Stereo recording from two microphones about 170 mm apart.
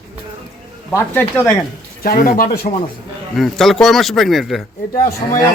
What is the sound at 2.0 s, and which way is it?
Speech, 60° left (ahead or behind).